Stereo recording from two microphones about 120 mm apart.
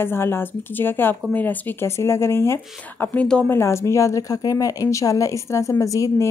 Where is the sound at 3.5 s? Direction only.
25° left (ahead or behind).